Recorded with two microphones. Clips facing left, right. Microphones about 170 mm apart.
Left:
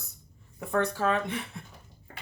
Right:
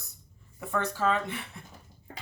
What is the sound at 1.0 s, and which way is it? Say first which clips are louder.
Speech: left 1 dB; 20° left (ahead or behind).